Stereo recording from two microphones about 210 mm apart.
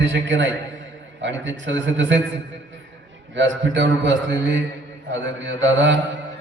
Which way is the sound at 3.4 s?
60° right (ahead or behind).